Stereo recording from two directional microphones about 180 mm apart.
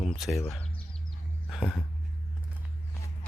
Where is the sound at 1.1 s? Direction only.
Centre (ahead or behind).